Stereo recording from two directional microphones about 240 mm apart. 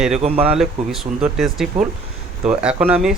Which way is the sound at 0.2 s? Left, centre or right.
Right.